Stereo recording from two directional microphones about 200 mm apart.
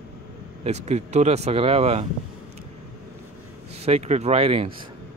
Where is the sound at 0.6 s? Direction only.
35° right (ahead or behind).